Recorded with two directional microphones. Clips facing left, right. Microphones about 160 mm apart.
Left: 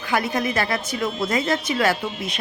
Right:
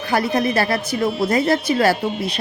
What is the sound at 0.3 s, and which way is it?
A woman's voice, 35° right (ahead or behind).